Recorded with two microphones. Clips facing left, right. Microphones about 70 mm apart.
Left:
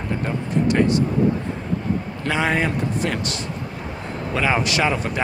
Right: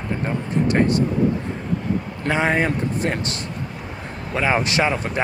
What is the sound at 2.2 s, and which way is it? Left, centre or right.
Speech, right.